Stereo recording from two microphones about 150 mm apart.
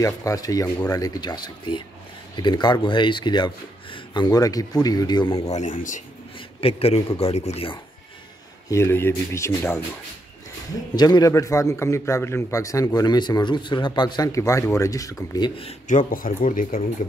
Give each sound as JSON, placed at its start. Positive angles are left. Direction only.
{"t": 0.0, "sound": "a man's voice", "side_deg": 20}
{"t": 5.5, "sound": "a man's voice", "side_deg": 55}
{"t": 6.6, "sound": "a man's voice", "side_deg": 45}
{"t": 8.6, "sound": "a man's voice", "side_deg": 15}
{"t": 11.0, "sound": "a man's voice", "side_deg": 25}
{"t": 15.9, "sound": "speech", "side_deg": 65}